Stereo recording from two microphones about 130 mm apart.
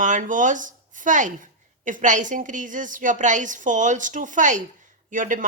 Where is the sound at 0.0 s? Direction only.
80° right.